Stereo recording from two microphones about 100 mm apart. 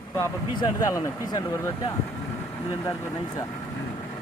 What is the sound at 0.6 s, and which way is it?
Speech, 35° left (ahead or behind).